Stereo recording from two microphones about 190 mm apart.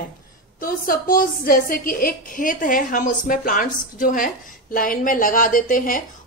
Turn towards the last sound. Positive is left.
turn(degrees=45)  # may be behind; listen again after turning